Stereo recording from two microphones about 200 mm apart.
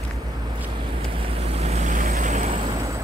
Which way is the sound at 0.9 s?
25° right (ahead or behind).